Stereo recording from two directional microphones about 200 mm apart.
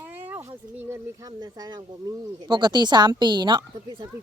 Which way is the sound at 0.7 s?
15° right (ahead or behind).